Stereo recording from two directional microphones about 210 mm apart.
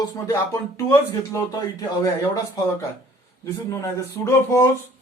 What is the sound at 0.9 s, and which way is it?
Speech, 15° left (ahead or behind).